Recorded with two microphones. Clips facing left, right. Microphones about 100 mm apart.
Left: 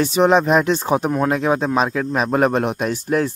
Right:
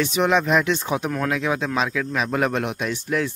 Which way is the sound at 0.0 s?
35° left (ahead or behind).